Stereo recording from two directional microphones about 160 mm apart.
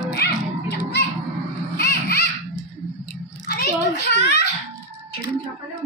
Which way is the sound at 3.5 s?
90° left.